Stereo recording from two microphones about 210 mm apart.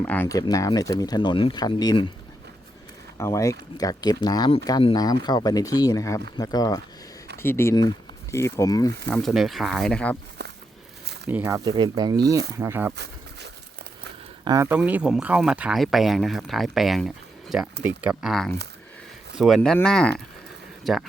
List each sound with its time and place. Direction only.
0.0 s speech: 10° left (ahead or behind)
3.2 s speech: 15° left (ahead or behind)
9.1 s speech: centre (ahead or behind)
11.3 s speech: 10° right (ahead or behind)
14.4 s speech: 15° right (ahead or behind)